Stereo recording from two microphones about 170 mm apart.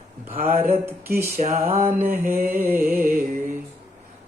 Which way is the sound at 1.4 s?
45° right (ahead or behind).